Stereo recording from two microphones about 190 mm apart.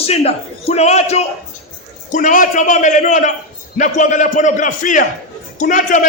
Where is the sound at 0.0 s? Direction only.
35° left (ahead or behind).